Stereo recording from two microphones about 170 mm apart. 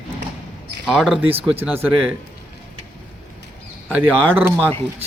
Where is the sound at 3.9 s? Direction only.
10° right (ahead or behind).